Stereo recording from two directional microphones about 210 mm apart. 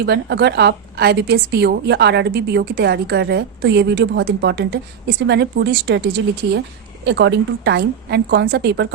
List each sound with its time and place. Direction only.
0.0 s a woman's voice: 50° right (ahead or behind)
7.0 s a woman's voice: 55° right (ahead or behind)